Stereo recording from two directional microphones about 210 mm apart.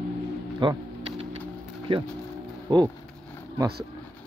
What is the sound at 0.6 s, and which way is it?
Music, 20° right (ahead or behind).